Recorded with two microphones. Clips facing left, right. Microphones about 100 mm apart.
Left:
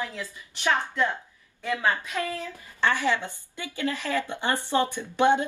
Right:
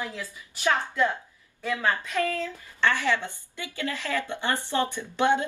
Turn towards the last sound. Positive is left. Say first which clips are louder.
# left 2 dB
turn(degrees=20)  # may be behind; listen again after turning